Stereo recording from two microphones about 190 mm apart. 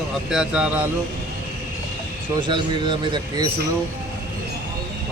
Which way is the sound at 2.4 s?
25° right (ahead or behind).